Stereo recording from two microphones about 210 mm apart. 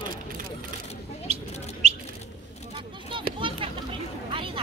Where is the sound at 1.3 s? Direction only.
30° right (ahead or behind).